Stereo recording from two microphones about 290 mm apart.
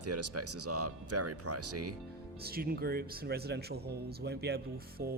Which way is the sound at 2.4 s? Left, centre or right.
Right.